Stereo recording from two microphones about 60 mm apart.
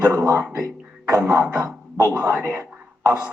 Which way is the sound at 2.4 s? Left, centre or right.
Right.